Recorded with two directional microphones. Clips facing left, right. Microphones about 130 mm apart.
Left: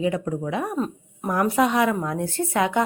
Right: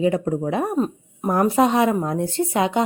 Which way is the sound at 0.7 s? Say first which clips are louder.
Right 4 dB; 20° right (ahead or behind).